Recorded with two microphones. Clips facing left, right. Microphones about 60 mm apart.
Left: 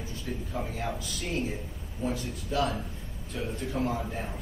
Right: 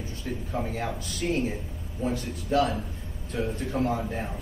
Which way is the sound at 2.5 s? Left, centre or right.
Right.